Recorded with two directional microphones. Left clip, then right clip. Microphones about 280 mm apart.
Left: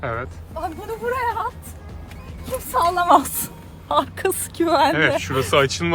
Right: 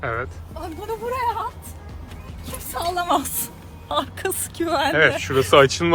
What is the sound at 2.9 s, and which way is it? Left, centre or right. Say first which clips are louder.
A woman's voice: left 5 dB; left.